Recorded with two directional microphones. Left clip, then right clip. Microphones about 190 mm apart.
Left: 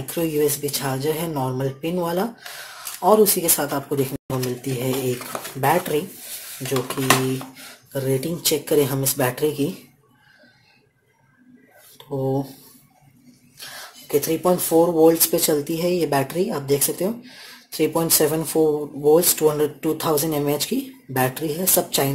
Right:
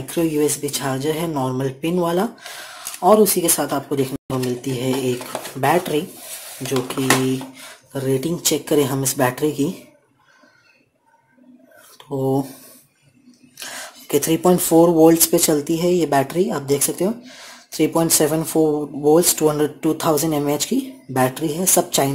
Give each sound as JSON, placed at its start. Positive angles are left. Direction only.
{"t": 0.0, "sound": "speech", "side_deg": -10}
{"t": 12.2, "sound": "speech", "side_deg": -25}
{"t": 13.6, "sound": "a sound", "side_deg": -20}
{"t": 15.0, "sound": "speech", "side_deg": -15}
{"t": 18.6, "sound": "speech", "side_deg": 0}